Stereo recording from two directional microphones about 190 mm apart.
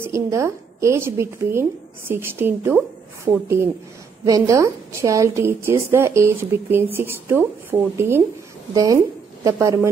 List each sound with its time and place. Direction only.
0.0 s a woman's voice: 15° right (ahead or behind)